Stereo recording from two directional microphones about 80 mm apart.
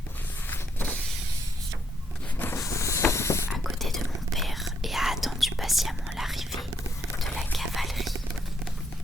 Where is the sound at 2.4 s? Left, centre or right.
Left.